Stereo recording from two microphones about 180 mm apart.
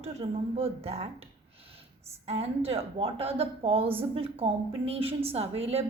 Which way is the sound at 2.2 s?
35° right (ahead or behind).